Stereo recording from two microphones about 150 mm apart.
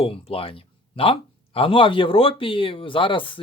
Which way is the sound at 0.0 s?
40° left (ahead or behind).